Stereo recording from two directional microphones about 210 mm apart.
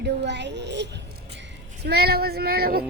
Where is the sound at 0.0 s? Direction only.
55° right (ahead or behind).